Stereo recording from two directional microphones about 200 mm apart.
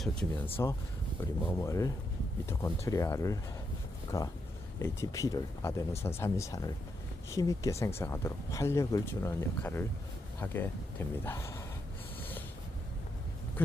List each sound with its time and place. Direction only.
0.0 s speech: 5° left (ahead or behind)